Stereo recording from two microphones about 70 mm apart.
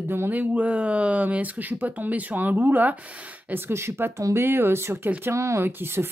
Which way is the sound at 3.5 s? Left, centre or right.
Right.